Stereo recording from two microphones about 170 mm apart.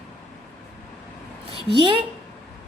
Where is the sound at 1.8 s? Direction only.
30° right (ahead or behind).